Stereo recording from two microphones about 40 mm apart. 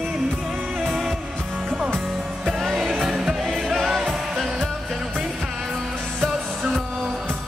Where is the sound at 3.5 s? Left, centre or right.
Centre.